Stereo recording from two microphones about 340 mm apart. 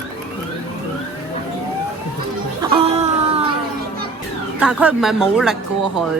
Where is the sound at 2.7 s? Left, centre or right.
Centre.